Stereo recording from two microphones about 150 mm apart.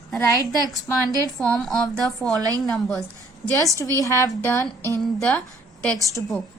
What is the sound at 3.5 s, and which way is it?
A woman's voice, 20° left (ahead or behind).